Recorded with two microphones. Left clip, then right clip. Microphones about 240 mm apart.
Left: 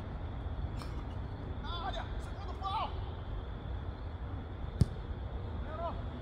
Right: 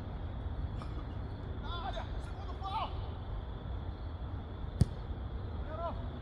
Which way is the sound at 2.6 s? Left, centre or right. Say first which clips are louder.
Left 2 dB; centre.